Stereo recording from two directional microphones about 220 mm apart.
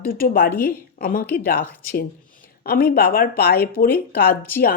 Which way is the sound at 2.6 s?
40° left (ahead or behind).